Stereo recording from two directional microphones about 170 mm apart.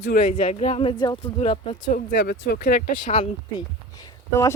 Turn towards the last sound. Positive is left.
turn(degrees=20)  # may be behind; listen again after turning